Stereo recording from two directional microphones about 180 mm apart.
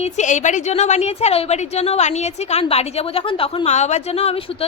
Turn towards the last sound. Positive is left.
turn(degrees=35)  # may be behind; listen again after turning